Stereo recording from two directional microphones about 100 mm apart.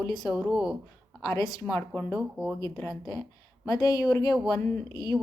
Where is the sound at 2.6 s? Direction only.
35° left (ahead or behind).